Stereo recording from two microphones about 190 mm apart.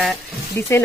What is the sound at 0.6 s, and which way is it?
Speech, 15° left (ahead or behind).